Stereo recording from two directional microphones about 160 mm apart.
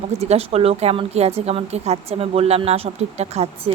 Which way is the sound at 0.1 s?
40° right (ahead or behind).